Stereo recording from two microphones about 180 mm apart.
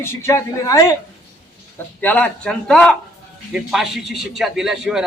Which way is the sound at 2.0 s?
10° left (ahead or behind).